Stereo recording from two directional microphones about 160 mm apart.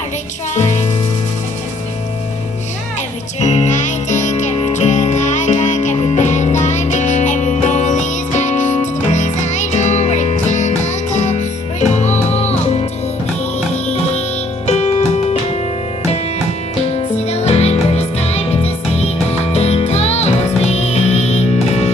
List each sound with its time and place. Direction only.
0.6 s music: 45° left (ahead or behind)
3.3 s music: 45° left (ahead or behind)
14.7 s music: 40° left (ahead or behind)
17.3 s music: 40° left (ahead or behind)